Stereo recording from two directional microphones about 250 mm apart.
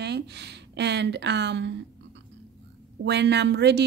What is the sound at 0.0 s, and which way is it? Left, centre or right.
Speech, right.